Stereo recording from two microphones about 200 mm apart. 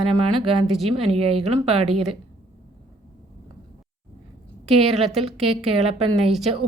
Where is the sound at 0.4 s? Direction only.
30° right (ahead or behind).